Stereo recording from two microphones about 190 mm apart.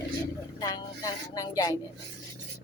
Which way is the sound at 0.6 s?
20° left (ahead or behind).